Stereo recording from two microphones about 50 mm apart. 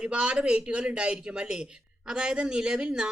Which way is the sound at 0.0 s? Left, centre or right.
Right.